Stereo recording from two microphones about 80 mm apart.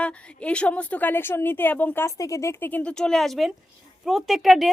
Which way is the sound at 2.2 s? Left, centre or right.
Left.